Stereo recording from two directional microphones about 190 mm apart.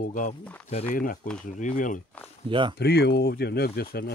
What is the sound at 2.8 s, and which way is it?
Speech, 60° left (ahead or behind).